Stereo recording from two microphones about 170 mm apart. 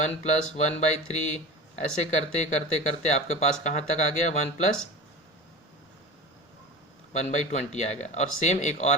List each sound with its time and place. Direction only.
0.0 s speech: 40° left (ahead or behind)
7.1 s speech: 45° left (ahead or behind)